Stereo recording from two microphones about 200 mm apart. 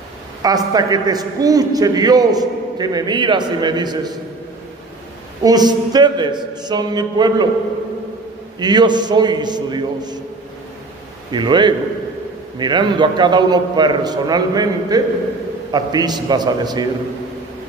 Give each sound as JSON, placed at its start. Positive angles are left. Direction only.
{"t": 0.4, "sound": "a man's voice", "side_deg": -20}
{"t": 5.4, "sound": "a man's voice", "side_deg": -20}
{"t": 8.5, "sound": "a man's voice", "side_deg": -20}
{"t": 11.3, "sound": "a man's voice", "side_deg": -20}